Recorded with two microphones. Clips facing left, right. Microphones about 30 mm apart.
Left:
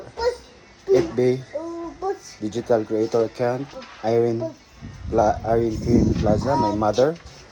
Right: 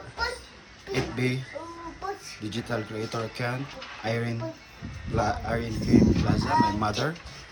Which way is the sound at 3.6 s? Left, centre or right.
Right.